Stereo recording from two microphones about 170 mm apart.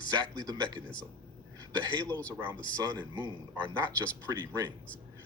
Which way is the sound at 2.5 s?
25° right (ahead or behind).